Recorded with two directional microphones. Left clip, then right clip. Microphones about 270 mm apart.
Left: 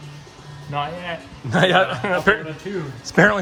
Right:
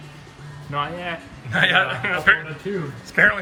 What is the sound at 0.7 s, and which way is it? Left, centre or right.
Speech, left.